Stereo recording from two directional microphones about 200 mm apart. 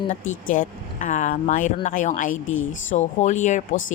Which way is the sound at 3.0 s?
35° left (ahead or behind).